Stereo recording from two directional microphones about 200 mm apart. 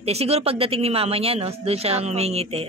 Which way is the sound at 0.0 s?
30° right (ahead or behind).